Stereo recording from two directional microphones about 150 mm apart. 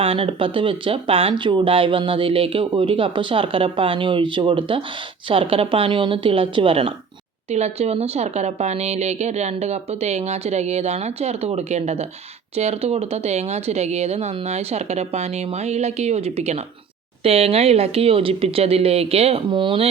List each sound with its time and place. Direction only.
0.0 s speech: 40° right (ahead or behind)